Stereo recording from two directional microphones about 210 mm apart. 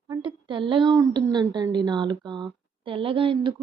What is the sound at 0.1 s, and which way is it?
A woman's voice, 25° right (ahead or behind).